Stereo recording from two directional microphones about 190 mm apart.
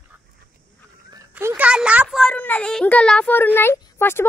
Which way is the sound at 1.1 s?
15° right (ahead or behind).